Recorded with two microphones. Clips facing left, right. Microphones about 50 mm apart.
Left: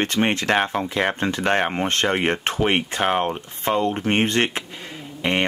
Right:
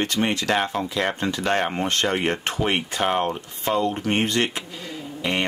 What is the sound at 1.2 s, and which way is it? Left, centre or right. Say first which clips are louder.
Speech: left 2 dB; left.